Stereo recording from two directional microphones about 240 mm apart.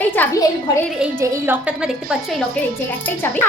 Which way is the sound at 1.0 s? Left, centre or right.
Centre.